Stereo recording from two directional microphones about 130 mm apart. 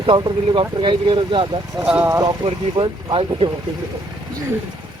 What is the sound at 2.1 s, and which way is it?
Speech, 30° right (ahead or behind).